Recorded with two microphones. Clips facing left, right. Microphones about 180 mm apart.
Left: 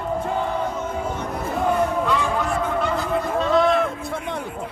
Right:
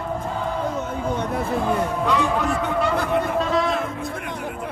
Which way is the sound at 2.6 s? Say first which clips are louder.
Right 1 dB; 60° right (ahead or behind).